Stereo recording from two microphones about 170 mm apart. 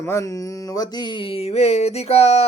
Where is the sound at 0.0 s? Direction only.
20° left (ahead or behind).